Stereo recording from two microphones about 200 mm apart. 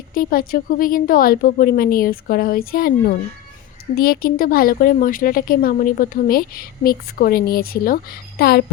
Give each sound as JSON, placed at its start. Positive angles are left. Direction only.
{"t": 0.1, "sound": "a woman's voice", "side_deg": 45}